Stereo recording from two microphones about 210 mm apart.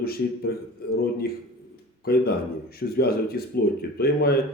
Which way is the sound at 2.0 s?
45° left (ahead or behind).